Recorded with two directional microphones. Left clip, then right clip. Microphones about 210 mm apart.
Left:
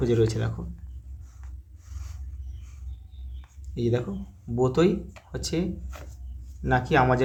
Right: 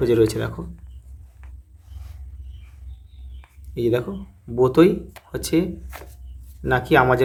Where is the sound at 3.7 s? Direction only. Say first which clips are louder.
Right 6 dB; 25° right (ahead or behind).